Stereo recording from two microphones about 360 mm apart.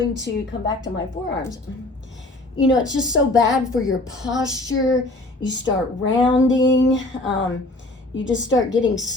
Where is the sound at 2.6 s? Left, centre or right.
Left.